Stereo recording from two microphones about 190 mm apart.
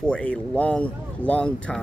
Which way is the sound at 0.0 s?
5° left (ahead or behind).